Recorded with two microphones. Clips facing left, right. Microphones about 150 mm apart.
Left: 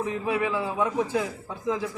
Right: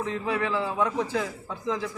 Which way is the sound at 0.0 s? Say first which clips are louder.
Left 2 dB; 15° left (ahead or behind).